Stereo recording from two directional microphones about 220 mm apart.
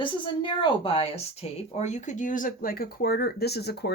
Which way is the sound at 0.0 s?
20° left (ahead or behind).